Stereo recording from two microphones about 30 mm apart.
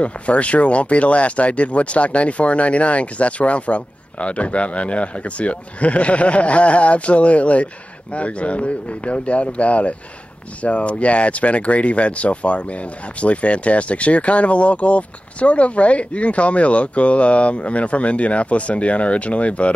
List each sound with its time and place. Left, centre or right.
0.0 s speech: left